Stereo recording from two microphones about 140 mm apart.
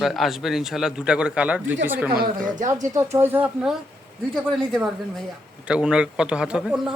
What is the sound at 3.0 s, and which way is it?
Speech, 15° right (ahead or behind).